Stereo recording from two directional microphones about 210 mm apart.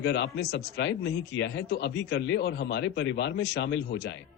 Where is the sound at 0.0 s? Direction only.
55° left (ahead or behind).